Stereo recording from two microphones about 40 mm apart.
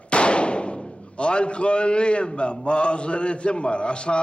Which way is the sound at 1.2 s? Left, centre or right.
Left.